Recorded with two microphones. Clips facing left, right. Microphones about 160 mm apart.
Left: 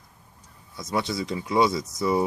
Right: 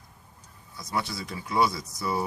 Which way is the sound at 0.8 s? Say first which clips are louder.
Left 5 dB; 20° left (ahead or behind).